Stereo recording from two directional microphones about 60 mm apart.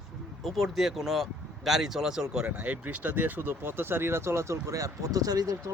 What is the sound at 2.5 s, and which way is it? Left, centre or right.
Speech, right.